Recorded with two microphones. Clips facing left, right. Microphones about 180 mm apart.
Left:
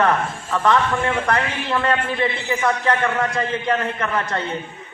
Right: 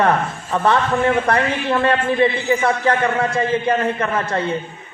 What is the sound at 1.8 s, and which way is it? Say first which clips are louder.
A man's voice: right 5 dB; 30° right (ahead or behind).